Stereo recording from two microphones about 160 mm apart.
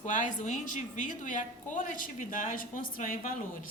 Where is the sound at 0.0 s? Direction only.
50° left (ahead or behind).